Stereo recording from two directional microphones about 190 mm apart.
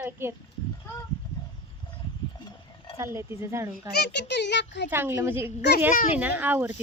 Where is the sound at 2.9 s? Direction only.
15° right (ahead or behind).